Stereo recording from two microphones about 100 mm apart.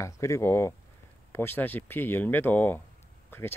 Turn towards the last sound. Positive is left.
turn(degrees=20)  # may be behind; listen again after turning